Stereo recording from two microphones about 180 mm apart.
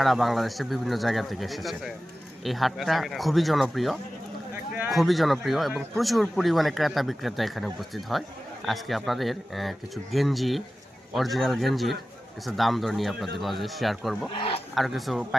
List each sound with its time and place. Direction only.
0.0 s speech: centre (ahead or behind)
14.3 s a man's voice: 30° left (ahead or behind)
14.8 s speech: centre (ahead or behind)